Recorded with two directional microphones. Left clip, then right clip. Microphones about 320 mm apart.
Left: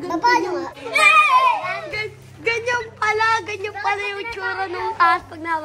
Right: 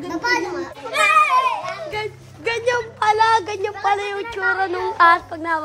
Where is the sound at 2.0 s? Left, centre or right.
Right.